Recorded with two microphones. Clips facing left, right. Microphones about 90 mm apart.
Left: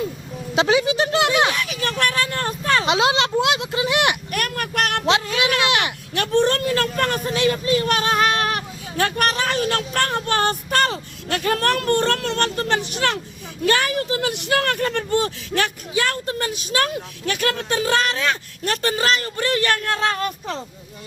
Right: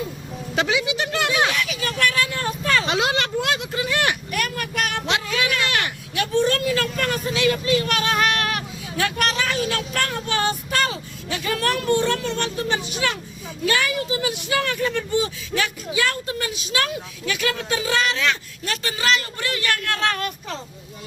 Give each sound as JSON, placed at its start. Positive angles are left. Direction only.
{"t": 0.7, "sound": "speech", "side_deg": 40}
{"t": 1.7, "sound": "vehicle", "side_deg": 50}
{"t": 2.6, "sound": "speech", "side_deg": 25}
{"t": 4.3, "sound": "a sound", "side_deg": 55}
{"t": 5.0, "sound": "a sound", "side_deg": 25}
{"t": 6.1, "sound": "speech", "side_deg": 60}
{"t": 7.5, "sound": "speech", "side_deg": 35}
{"t": 13.7, "sound": "speech", "side_deg": 45}
{"t": 19.8, "sound": "a sound", "side_deg": 25}